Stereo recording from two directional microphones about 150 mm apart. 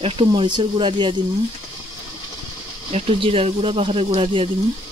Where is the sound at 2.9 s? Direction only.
40° right (ahead or behind).